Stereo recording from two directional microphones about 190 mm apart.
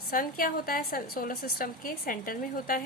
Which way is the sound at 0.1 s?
45° left (ahead or behind).